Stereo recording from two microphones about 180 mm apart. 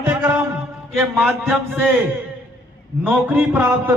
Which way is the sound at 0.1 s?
10° right (ahead or behind).